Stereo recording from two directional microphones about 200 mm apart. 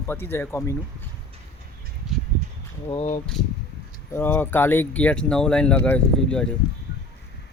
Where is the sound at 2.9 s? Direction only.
35° left (ahead or behind).